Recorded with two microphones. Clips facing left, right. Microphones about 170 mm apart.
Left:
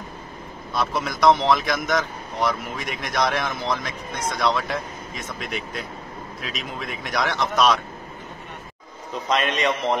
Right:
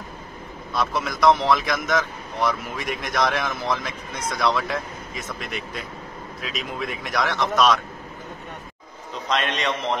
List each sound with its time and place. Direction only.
0.7 s speech: centre (ahead or behind)
9.3 s speech: 5° left (ahead or behind)